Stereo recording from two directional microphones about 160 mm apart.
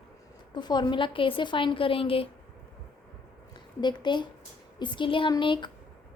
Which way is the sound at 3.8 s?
30° left (ahead or behind).